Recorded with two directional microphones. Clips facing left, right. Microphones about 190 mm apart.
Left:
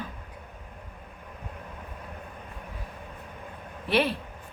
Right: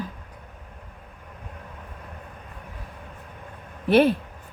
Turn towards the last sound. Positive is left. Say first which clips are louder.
# right 8 dB
turn(degrees=-45)  # may be behind; listen again after turning